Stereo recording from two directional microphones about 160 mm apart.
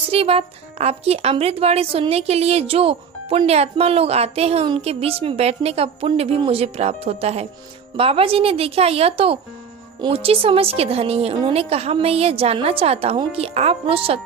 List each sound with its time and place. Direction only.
0.1 s speech: 35° right (ahead or behind)